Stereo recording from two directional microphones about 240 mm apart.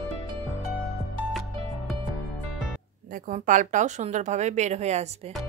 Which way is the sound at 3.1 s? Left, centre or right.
Right.